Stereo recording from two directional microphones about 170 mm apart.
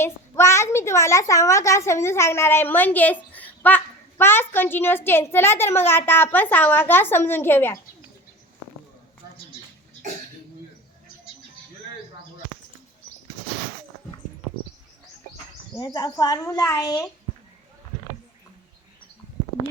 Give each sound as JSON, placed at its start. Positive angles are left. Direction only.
{"t": 0.0, "sound": "a woman's voice", "side_deg": 15}
{"t": 15.7, "sound": "speech", "side_deg": 20}